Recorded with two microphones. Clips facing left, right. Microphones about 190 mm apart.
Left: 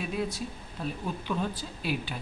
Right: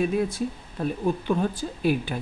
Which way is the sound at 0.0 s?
50° right (ahead or behind).